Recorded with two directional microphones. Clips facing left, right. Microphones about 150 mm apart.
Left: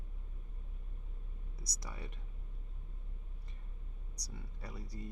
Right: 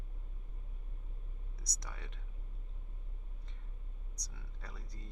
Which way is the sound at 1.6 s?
10° left (ahead or behind).